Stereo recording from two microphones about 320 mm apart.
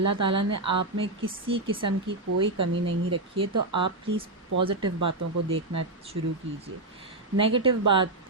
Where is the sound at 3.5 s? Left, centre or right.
Right.